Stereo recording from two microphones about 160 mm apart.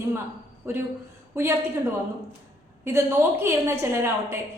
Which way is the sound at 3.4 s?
15° right (ahead or behind).